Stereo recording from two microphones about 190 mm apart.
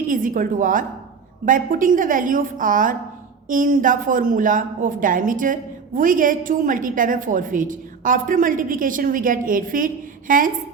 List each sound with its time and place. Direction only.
0.1 s a woman's voice: 45° right (ahead or behind)